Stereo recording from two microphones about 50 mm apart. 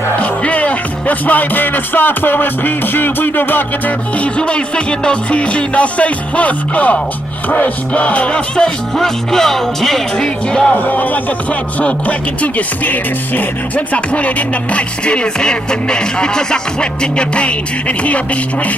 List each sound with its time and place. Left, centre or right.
0.2 s music: left
4.2 s music: left
7.4 s speech: left
8.5 s music: centre
10.8 s speech: left
13.9 s music: left